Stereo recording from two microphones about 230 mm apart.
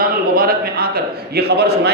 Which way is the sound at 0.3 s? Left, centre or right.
Right.